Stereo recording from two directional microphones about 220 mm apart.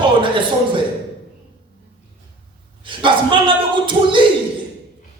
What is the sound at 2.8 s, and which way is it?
Speech, 20° right (ahead or behind).